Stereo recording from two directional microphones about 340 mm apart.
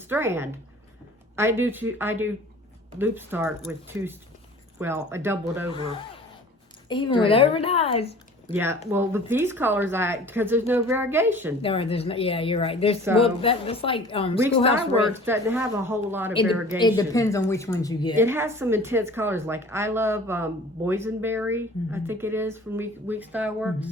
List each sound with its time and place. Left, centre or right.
0.1 s a woman's voice: centre
5.7 s a woman's voice: centre
8.9 s a woman's voice: centre
11.6 s a woman's voice: centre
15.0 s a woman's voice: centre
17.0 s a woman's voice: centre
18.2 s a woman's voice: centre